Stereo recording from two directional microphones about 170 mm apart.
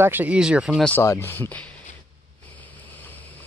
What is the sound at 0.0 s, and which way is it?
Speech, 10° right (ahead or behind).